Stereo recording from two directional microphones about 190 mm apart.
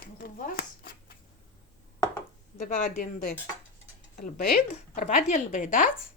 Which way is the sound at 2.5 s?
40° left (ahead or behind).